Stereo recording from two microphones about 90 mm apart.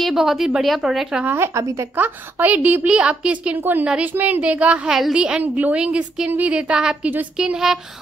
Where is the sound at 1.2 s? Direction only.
25° right (ahead or behind).